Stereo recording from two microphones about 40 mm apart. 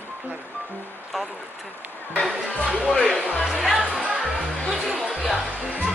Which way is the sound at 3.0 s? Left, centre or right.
Centre.